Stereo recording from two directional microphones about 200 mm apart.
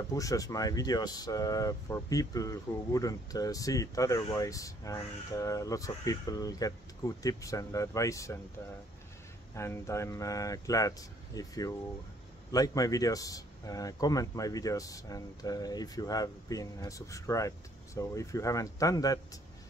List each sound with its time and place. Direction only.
0.1 s a man's voice: 15° left (ahead or behind)
9.6 s a man's voice: 15° left (ahead or behind)